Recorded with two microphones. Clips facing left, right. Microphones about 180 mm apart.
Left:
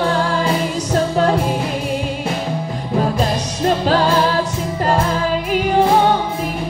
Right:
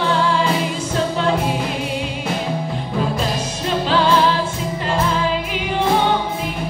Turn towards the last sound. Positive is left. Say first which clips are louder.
# left 3 dB
turn(degrees=45)  # may be behind; listen again after turning